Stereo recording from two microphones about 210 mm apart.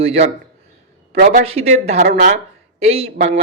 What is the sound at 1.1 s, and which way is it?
Speech, 40° right (ahead or behind).